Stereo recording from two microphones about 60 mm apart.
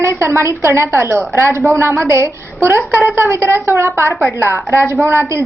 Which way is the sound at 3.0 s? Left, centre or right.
Right.